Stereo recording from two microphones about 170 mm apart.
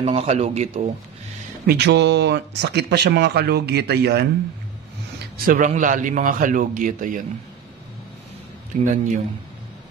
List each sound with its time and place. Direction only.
0.0 s speech: 35° right (ahead or behind)
1.7 s speech: 85° right
5.4 s a man's voice: 55° right (ahead or behind)
8.8 s a man's voice: 45° right (ahead or behind)